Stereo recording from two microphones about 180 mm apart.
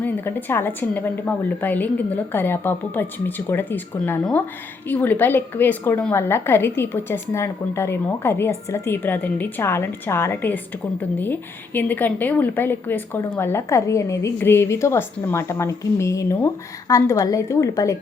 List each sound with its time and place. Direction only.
0.0 s a woman's voice: 10° left (ahead or behind)